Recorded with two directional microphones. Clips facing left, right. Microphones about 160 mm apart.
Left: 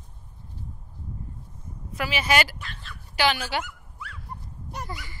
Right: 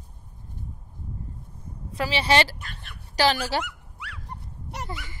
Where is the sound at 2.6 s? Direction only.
55° right (ahead or behind).